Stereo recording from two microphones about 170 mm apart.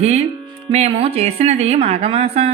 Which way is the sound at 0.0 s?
40° right (ahead or behind).